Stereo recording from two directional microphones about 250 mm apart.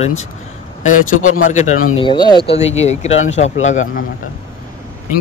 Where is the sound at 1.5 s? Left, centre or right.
Left.